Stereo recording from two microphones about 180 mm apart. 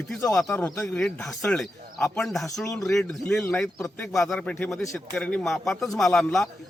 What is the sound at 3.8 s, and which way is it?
Speech, 15° left (ahead or behind).